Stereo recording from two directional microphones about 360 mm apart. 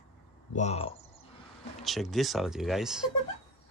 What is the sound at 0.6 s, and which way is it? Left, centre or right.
Speech, centre.